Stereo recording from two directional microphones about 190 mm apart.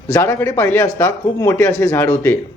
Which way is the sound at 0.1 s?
15° left (ahead or behind).